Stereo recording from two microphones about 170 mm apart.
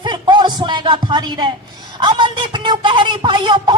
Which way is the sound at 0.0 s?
25° right (ahead or behind).